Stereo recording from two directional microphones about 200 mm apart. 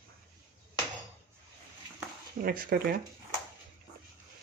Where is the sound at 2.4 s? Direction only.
45° right (ahead or behind).